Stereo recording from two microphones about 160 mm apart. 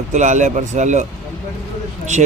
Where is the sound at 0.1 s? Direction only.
50° right (ahead or behind).